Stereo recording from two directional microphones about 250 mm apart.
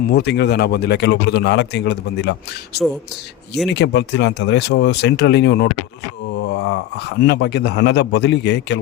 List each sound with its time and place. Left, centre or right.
0.1 s speech: left
3.7 s a man's voice: left